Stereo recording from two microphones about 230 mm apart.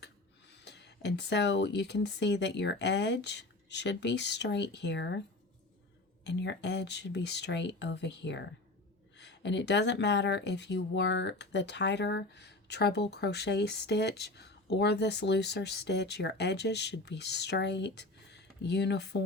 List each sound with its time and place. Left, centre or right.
0.6 s speech: left
6.2 s speech: left